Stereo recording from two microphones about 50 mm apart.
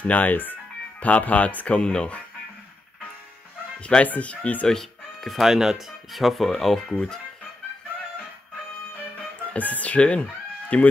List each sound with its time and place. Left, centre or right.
0.0 s speech: left
1.8 s speech: centre
3.8 s speech: left
5.2 s speech: centre
9.5 s speech: left